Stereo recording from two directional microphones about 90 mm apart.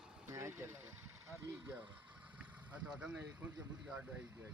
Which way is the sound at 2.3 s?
15° right (ahead or behind).